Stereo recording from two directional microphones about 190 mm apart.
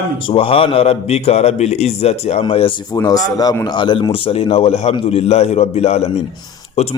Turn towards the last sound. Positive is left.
turn(degrees=35)  # may be behind; listen again after turning